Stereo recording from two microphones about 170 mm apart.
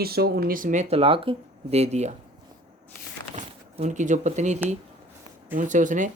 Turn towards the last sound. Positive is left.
turn(degrees=-50)  # may be behind; listen again after turning